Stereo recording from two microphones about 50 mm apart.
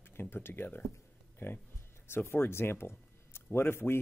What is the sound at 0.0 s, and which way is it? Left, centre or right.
Speech, left.